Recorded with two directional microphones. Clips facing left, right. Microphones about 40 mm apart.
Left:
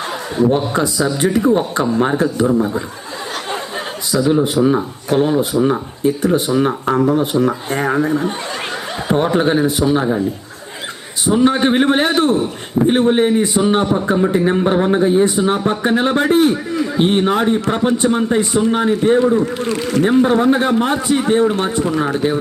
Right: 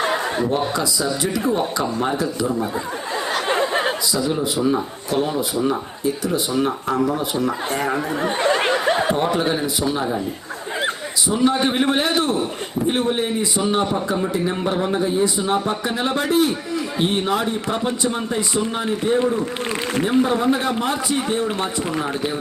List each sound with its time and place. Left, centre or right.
0.0 s a sound: right
0.7 s speech: left
3.5 s chatter: right
4.7 s speech: left
8.5 s snicker: right
9.1 s speech: left
11.3 s speech: left